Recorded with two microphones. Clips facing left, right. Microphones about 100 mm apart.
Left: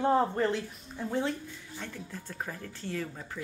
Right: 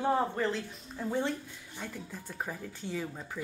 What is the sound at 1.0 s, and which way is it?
A woman's voice, centre (ahead or behind).